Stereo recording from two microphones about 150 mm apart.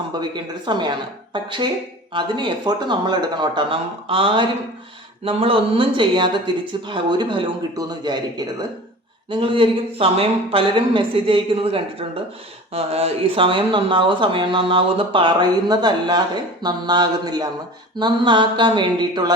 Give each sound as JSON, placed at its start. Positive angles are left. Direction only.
{"t": 0.1, "sound": "speech", "side_deg": -30}